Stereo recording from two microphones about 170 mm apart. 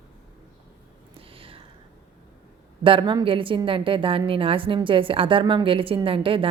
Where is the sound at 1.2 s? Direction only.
35° right (ahead or behind).